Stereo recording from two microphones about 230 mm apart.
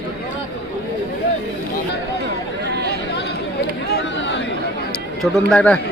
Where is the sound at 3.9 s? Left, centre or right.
Left.